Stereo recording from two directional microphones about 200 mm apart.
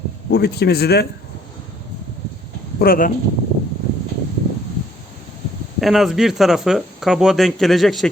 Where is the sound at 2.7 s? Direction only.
45° left (ahead or behind).